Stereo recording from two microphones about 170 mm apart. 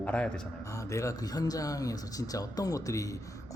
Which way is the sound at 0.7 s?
20° left (ahead or behind).